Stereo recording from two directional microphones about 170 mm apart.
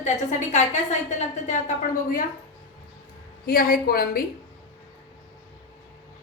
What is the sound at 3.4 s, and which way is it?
Speech, 60° left (ahead or behind).